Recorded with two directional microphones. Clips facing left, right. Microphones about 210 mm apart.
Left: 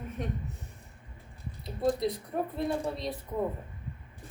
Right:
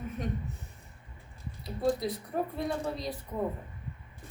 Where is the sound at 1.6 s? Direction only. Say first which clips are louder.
Left 1 dB; centre (ahead or behind).